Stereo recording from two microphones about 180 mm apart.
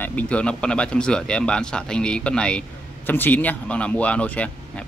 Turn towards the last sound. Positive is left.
turn(degrees=5)  # may be behind; listen again after turning